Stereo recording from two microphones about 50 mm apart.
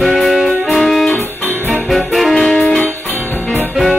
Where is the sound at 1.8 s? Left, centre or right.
Centre.